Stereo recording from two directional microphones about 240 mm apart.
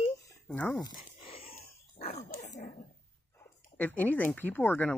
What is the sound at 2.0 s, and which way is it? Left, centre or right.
Dog, left.